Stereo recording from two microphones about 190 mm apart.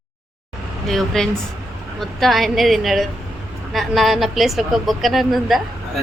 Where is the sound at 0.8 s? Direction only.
Centre (ahead or behind).